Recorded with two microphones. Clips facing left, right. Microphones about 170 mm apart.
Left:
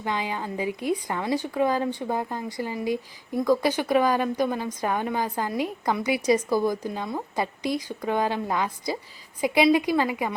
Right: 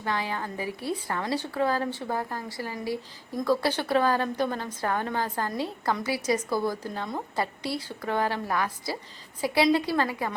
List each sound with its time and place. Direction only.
0.0 s a woman's voice: 15° left (ahead or behind)